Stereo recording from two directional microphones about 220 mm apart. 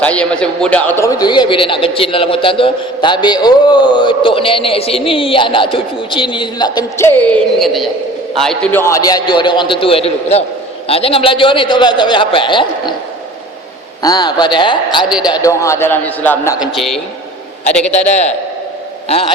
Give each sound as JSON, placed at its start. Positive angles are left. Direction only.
{"t": 0.0, "sound": "speech", "side_deg": 5}
{"t": 14.0, "sound": "a man's voice", "side_deg": 20}
{"t": 17.9, "sound": "a man's voice", "side_deg": 30}